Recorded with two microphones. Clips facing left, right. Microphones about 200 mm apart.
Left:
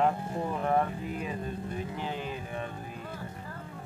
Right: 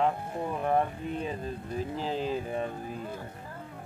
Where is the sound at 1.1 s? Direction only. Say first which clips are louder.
Right 1 dB; 30° right (ahead or behind).